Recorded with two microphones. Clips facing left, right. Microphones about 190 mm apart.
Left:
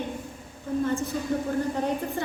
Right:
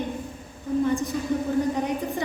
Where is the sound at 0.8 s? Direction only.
15° right (ahead or behind).